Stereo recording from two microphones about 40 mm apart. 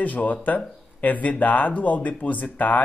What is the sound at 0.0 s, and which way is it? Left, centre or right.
Speech, left.